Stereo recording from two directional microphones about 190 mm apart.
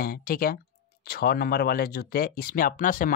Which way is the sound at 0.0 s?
50° left (ahead or behind).